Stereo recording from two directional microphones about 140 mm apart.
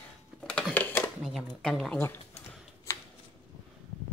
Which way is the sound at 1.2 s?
5° right (ahead or behind).